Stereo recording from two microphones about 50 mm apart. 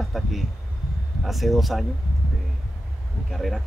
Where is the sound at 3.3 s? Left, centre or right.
Centre.